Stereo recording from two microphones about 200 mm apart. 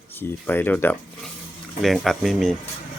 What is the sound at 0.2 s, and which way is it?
Speech, 10° left (ahead or behind).